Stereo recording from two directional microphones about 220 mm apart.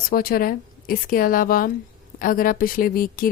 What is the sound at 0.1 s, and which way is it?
Speech, 40° left (ahead or behind).